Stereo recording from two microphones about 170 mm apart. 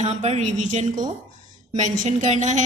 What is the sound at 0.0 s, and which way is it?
A woman's voice, 40° right (ahead or behind).